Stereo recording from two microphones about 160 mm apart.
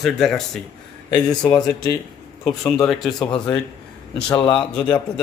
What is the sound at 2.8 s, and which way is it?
Speech, centre (ahead or behind).